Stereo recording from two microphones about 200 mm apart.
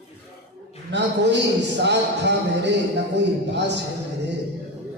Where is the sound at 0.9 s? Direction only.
60° right (ahead or behind).